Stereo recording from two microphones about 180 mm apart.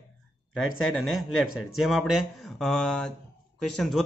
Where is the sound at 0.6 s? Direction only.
90° left.